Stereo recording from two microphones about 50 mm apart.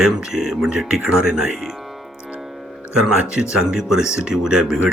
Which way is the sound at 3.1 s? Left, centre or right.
Centre.